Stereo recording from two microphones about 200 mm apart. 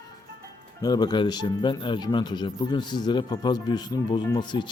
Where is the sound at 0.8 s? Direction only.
20° left (ahead or behind).